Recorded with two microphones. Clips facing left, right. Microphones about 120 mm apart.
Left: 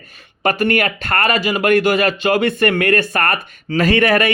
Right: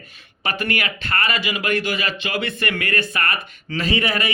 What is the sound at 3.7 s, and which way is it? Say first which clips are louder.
Speech: left 8 dB; 60° left (ahead or behind).